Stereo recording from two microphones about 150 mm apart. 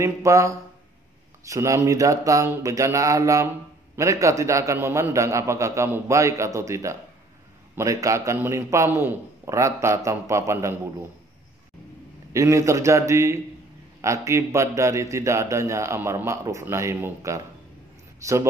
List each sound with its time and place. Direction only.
0.0 s speech: 20° right (ahead or behind)
12.3 s speech: 20° right (ahead or behind)